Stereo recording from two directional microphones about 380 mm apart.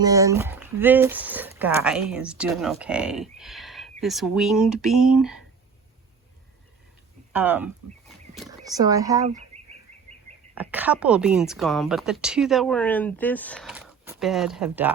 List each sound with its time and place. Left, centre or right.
0.0 s speech: centre
7.3 s speech: centre
9.5 s a sound: centre
10.5 s speech: centre